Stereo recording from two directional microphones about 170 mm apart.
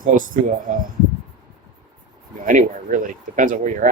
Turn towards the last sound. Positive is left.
turn(degrees=-50)  # may be behind; listen again after turning